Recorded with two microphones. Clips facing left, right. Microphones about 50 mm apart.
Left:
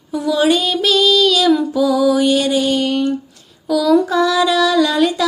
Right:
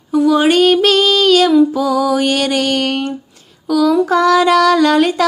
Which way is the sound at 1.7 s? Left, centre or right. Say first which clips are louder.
Left 1 dB; right.